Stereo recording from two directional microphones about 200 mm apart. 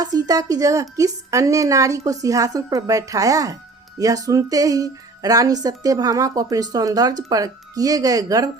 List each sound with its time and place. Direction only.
0.0 s a woman's voice: 20° right (ahead or behind)